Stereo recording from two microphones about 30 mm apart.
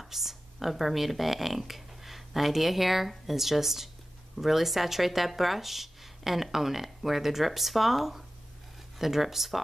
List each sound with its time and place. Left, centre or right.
0.0 s speech: centre